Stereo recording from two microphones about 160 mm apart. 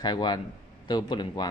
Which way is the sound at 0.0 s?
25° left (ahead or behind).